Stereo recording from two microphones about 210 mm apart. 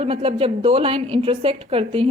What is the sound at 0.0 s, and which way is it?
A woman's voice, 30° right (ahead or behind).